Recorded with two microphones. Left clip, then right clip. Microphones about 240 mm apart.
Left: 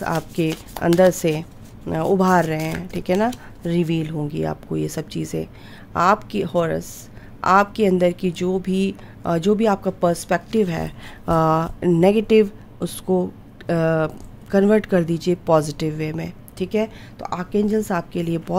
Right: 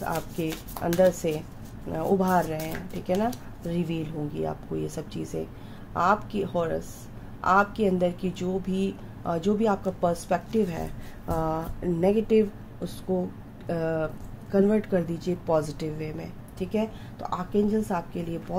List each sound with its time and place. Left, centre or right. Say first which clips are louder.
0.0 s a woman's voice: left 7 dB; left